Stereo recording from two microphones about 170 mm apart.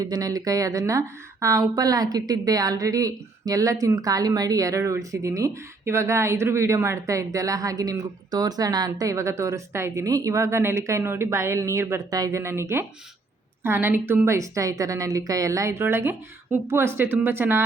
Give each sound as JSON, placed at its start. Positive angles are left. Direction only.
{"t": 0.0, "sound": "a woman's voice", "side_deg": -20}